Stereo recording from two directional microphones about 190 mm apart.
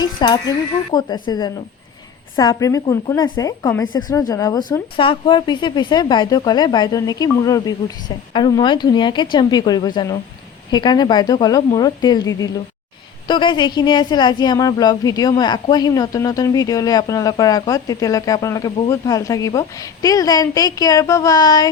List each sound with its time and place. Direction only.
0.0 s a woman's voice: 20° left (ahead or behind)